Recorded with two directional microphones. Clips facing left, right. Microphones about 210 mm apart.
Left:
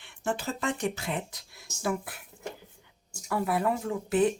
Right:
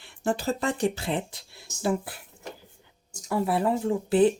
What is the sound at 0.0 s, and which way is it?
Speech, 35° right (ahead or behind).